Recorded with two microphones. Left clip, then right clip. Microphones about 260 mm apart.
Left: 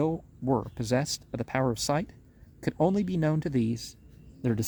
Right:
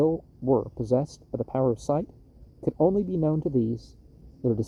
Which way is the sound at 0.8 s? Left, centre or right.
Left.